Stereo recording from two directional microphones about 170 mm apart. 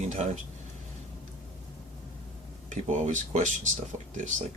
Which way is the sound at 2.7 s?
45° right (ahead or behind).